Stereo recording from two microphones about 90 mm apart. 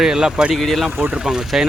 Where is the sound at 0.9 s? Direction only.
15° right (ahead or behind).